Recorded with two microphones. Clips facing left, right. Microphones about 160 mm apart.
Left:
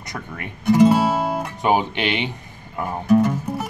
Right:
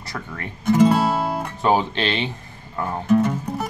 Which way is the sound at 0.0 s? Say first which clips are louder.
Even; 20° left (ahead or behind).